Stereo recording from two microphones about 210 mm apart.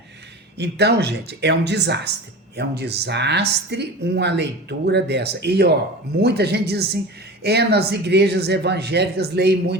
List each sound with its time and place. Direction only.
0.5 s speech: 50° right (ahead or behind)